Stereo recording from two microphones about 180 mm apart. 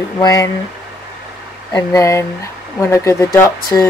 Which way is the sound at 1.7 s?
20° left (ahead or behind).